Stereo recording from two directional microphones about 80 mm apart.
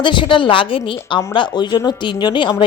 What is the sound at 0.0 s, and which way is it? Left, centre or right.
A woman's voice, left.